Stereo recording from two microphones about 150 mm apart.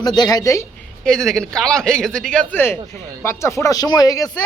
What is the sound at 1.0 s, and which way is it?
A man's voice, 5° left (ahead or behind).